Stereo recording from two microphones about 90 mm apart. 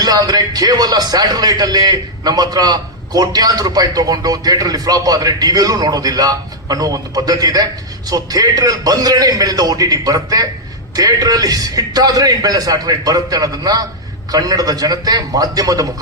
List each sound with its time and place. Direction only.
0.0 s speech: 45° right (ahead or behind)